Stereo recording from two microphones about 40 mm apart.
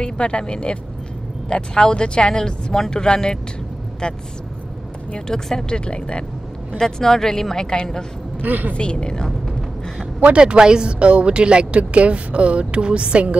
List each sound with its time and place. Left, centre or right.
0.0 s speech: left
5.3 s speech: centre
5.9 s speech: left
6.8 s speech: centre
8.4 s a woman's voice: right
8.7 s speech: left
10.2 s speech: right